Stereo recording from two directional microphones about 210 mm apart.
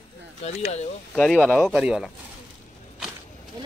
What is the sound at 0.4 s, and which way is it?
Speech, 30° left (ahead or behind).